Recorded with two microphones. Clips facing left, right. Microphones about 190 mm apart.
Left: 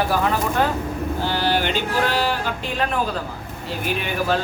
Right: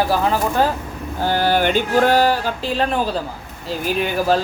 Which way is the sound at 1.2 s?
45° right (ahead or behind).